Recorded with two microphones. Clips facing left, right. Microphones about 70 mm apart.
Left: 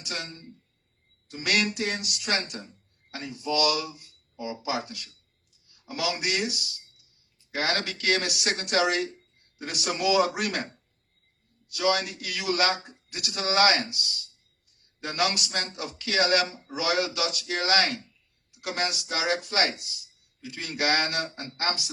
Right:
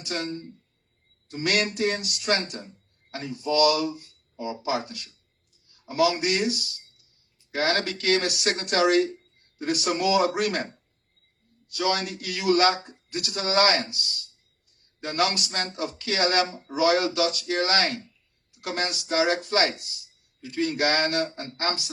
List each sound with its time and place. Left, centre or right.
0.0 s speech: right
15.0 s speech: right